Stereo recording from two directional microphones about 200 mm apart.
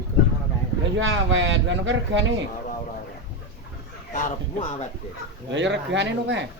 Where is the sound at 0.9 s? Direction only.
70° right (ahead or behind).